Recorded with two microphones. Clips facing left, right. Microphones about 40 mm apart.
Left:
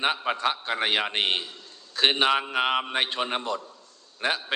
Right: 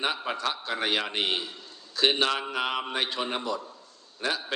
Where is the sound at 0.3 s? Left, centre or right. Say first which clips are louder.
Left 4 dB; left.